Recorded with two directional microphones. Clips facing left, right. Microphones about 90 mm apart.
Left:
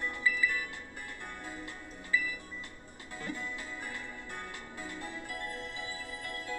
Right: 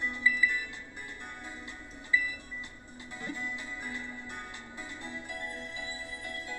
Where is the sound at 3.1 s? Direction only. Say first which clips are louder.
Right 1 dB; 20° right (ahead or behind).